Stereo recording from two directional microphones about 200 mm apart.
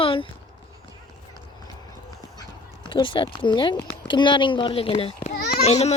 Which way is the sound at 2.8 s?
25° left (ahead or behind).